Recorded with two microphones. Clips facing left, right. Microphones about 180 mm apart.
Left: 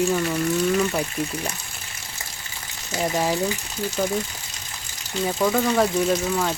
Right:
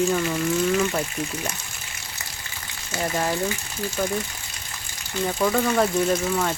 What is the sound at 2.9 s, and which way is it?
Speech, 15° left (ahead or behind).